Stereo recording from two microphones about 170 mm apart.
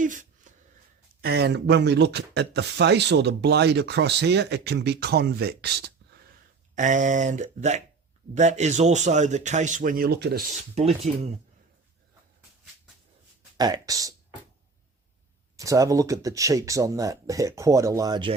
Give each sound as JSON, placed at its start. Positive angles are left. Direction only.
{"t": 0.0, "sound": "a sound", "side_deg": -50}
{"t": 1.2, "sound": "speech", "side_deg": -75}
{"t": 6.7, "sound": "speech", "side_deg": -45}
{"t": 10.8, "sound": "speech", "side_deg": -35}
{"t": 13.6, "sound": "speech", "side_deg": -20}
{"t": 15.5, "sound": "speech", "side_deg": -20}